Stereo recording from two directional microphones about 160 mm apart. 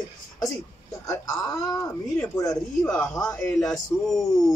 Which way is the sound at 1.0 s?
20° left (ahead or behind).